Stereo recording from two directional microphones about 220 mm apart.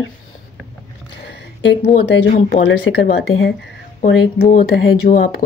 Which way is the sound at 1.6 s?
50° left (ahead or behind).